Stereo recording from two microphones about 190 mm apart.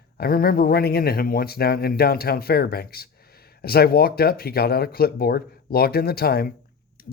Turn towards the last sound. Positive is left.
turn(degrees=55)  # may be behind; listen again after turning